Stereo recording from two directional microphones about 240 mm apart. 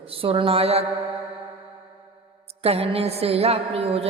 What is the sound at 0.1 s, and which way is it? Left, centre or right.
Speech, right.